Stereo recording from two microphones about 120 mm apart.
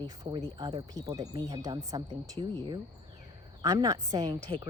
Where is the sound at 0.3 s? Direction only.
35° right (ahead or behind).